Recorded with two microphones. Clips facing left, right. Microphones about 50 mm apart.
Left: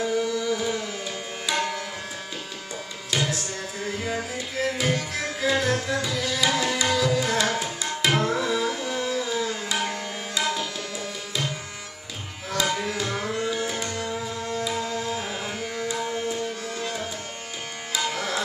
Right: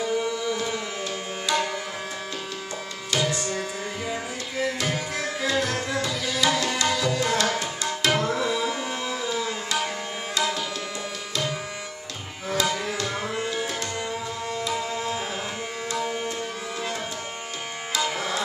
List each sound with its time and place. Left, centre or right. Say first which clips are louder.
0.0 s carnatic music: left 1 dB; centre
1.5 s tabla: right 1 dB; centre
3.1 s music: right 2 dB; centre
5.9 s tabla: even; centre
8.5 s music: left 1 dB; centre
10.4 s tabla: even; centre
12.5 s tabla: even; centre
13.2 s music: left 1 dB; centre
14.8 s tabla: even; centre
16.0 s music: right 1 dB; centre